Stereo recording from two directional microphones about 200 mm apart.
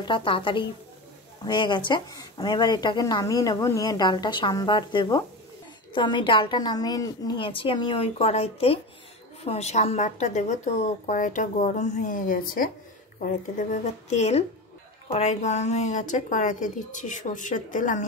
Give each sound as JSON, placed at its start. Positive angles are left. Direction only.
{"t": 0.0, "sound": "a woman's voice", "side_deg": 25}